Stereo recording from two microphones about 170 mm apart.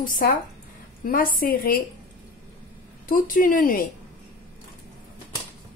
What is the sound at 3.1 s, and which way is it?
Speech, 55° left (ahead or behind).